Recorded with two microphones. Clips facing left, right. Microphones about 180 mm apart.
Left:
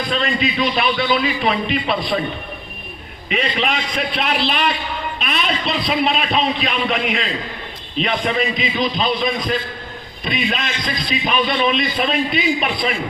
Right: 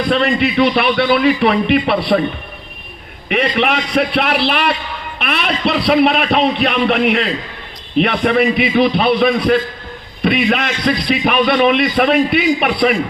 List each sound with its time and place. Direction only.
0.1 s a man's voice: 65° right (ahead or behind)
3.2 s a man's voice: 65° right (ahead or behind)